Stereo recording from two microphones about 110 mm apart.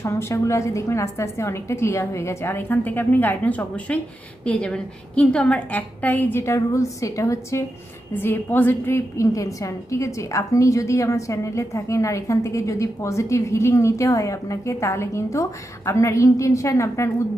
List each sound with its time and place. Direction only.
0.0 s a woman's voice: 25° left (ahead or behind)